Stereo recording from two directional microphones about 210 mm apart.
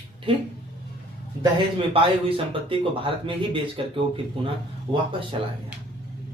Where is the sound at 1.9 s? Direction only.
25° right (ahead or behind).